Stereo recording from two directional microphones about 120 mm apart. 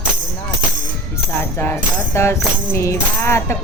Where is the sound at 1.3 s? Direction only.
15° left (ahead or behind).